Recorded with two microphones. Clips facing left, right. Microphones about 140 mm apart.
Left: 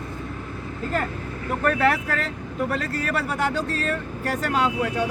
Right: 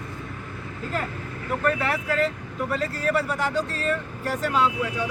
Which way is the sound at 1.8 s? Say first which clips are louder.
Left 2 dB; 60° left (ahead or behind).